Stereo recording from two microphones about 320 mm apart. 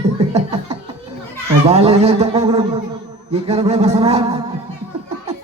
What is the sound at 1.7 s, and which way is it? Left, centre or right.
Speech, centre.